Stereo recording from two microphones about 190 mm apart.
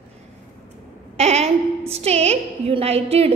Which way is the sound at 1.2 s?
35° right (ahead or behind).